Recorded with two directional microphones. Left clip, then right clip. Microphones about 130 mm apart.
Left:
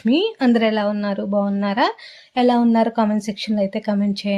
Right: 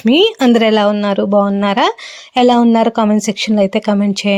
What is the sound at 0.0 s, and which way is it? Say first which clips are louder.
Speech: right 8 dB; 60° right (ahead or behind).